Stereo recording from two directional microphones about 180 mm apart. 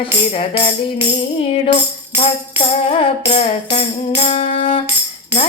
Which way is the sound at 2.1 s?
30° left (ahead or behind).